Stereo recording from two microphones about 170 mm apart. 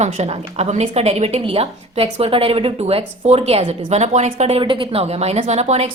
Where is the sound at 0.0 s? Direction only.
40° right (ahead or behind).